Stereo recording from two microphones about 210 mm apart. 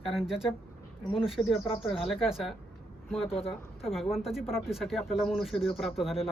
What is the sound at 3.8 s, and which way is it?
A woman's voice, centre (ahead or behind).